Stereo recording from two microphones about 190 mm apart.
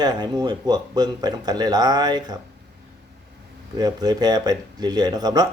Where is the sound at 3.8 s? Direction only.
20° right (ahead or behind).